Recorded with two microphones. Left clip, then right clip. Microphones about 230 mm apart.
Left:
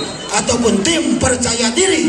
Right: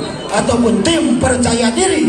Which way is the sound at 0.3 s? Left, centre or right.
Left.